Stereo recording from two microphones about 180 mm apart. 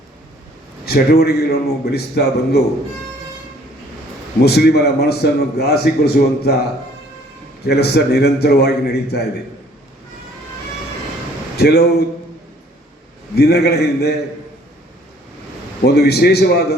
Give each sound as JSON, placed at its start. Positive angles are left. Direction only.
{"t": 0.9, "sound": "a man's voice", "side_deg": 60}
{"t": 4.4, "sound": "a man's voice", "side_deg": 65}
{"t": 11.5, "sound": "a man's voice", "side_deg": 60}
{"t": 13.3, "sound": "a man's voice", "side_deg": 65}
{"t": 15.8, "sound": "a man's voice", "side_deg": 65}